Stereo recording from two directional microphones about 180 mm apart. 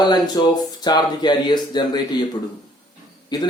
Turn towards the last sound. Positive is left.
turn(degrees=25)  # may be behind; listen again after turning